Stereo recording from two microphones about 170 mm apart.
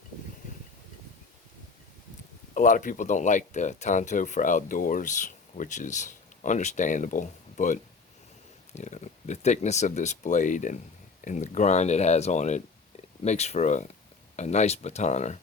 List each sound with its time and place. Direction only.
2.6 s speech: 50° left (ahead or behind)